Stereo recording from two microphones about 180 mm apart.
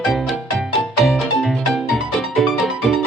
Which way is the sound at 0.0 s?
Centre (ahead or behind).